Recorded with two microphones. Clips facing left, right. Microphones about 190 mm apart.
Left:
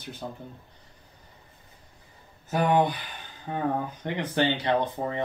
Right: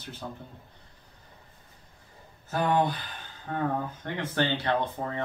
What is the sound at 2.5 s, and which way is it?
Speech, 15° left (ahead or behind).